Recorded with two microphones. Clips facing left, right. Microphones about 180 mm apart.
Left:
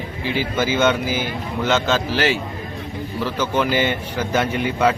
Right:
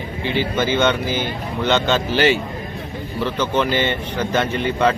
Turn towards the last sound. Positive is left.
turn(degrees=10)  # may be behind; listen again after turning